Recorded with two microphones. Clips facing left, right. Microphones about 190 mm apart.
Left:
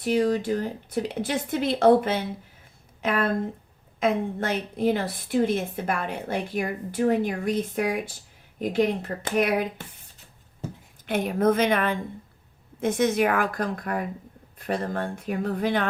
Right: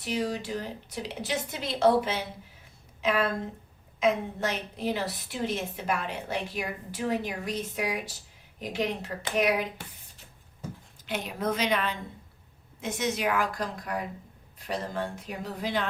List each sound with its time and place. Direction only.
0.0 s a woman's voice: 50° left (ahead or behind)
11.0 s a woman's voice: 50° left (ahead or behind)